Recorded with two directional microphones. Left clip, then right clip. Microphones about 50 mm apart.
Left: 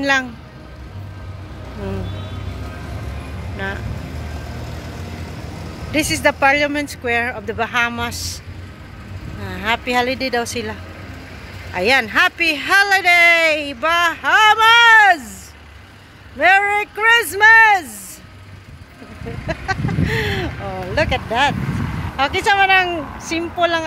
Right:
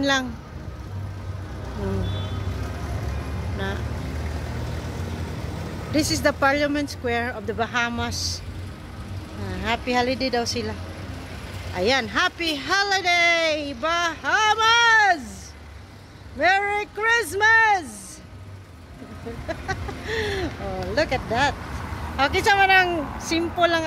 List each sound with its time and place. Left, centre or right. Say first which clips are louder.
0.0 s speech: left 5 dB; left
1.8 s a woman's voice: left 2 dB; centre
2.6 s vehicle: left 1 dB; centre
5.9 s speech: left 5 dB; left
9.4 s speech: left 6 dB; left
11.7 s speech: left 7 dB; left
16.3 s speech: left 7 dB; left
19.4 s vehicle: left 7 dB; left
20.1 s a sound: left 4 dB; left
20.5 s vehicle: left 4 dB; centre
20.9 s speech: left 5 dB; left
21.6 s speech: left 6 dB; centre
22.9 s a woman's voice: left 2 dB; centre